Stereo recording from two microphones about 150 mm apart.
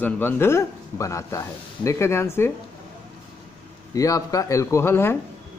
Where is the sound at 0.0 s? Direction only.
15° left (ahead or behind).